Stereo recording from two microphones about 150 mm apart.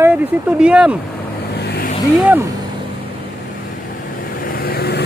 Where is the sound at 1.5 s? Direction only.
90° left.